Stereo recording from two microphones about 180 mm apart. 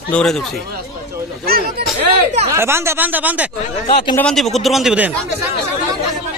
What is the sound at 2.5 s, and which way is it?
Speech, 15° right (ahead or behind).